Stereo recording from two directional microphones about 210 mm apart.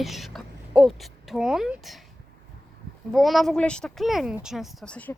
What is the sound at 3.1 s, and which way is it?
Speech, centre (ahead or behind).